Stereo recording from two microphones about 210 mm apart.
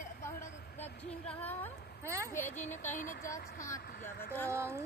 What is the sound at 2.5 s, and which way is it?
Speech, 35° left (ahead or behind).